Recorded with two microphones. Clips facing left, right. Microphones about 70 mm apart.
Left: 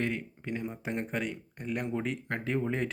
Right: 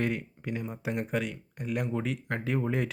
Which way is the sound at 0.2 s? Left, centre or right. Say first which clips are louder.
Even; centre.